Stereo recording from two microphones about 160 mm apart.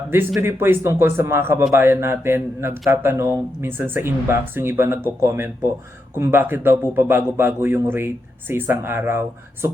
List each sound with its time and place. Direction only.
0.3 s a man's voice: 15° right (ahead or behind)